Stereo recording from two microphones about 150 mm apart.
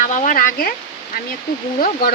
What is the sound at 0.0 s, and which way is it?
Speech, 60° left (ahead or behind).